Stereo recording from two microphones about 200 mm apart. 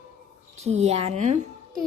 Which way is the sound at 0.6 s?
35° right (ahead or behind).